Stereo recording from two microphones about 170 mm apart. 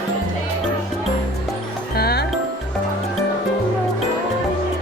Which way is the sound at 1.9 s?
65° left (ahead or behind).